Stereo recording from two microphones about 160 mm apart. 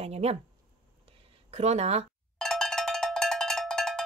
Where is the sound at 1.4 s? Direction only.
40° right (ahead or behind).